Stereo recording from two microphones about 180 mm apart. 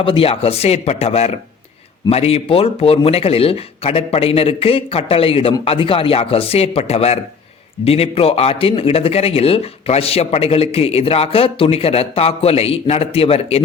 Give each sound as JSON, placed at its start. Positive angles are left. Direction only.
{"t": 0.0, "sound": "speech", "side_deg": 30}